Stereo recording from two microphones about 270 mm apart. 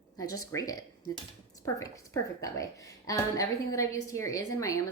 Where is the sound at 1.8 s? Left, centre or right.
Centre.